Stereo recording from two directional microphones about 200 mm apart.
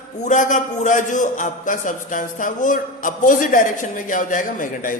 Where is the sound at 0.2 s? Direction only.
40° left (ahead or behind).